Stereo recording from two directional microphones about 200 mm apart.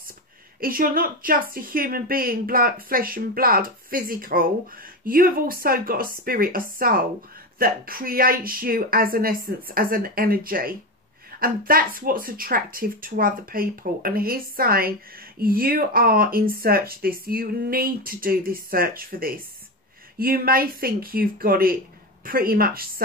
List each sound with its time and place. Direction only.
0.6 s speech: 45° right (ahead or behind)